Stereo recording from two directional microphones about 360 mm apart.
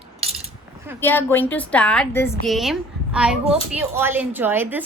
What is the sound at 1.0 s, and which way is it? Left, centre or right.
A woman's voice, centre.